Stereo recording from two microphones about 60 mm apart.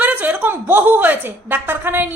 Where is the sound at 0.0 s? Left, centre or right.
Right.